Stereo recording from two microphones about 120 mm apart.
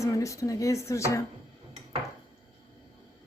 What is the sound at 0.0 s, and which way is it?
Speech, 25° left (ahead or behind).